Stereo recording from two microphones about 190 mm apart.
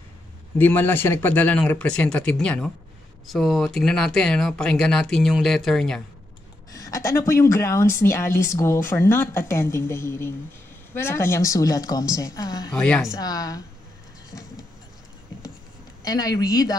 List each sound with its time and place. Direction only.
0.6 s a woman's voice: 10° left (ahead or behind)
6.7 s a woman's voice: 15° left (ahead or behind)
12.7 s speech: 5° left (ahead or behind)
13.1 s speech: 20° left (ahead or behind)
14.3 s vehicle: 15° left (ahead or behind)
16.0 s speech: 20° left (ahead or behind)